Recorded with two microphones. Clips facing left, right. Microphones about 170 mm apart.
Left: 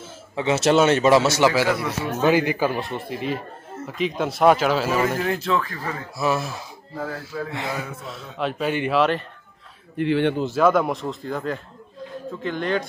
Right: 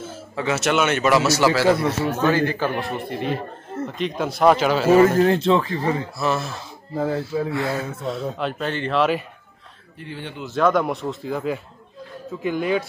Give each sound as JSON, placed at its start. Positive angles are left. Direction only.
{"t": 0.4, "sound": "a man's voice", "side_deg": 25}
{"t": 2.8, "sound": "speech", "side_deg": 0}
{"t": 4.9, "sound": "speech", "side_deg": -40}
{"t": 6.1, "sound": "a man's voice", "side_deg": 10}
{"t": 7.0, "sound": "speech", "side_deg": -25}
{"t": 7.5, "sound": "a man's voice", "side_deg": 20}
{"t": 8.0, "sound": "a man's voice", "side_deg": 0}
{"t": 8.9, "sound": "speech", "side_deg": 0}
{"t": 9.9, "sound": "speech", "side_deg": 75}
{"t": 10.5, "sound": "a man's voice", "side_deg": 5}